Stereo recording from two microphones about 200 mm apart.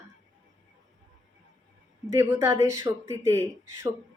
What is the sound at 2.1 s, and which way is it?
Speech, 15° right (ahead or behind).